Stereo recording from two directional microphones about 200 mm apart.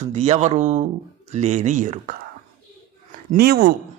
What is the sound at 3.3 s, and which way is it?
Speech, 50° right (ahead or behind).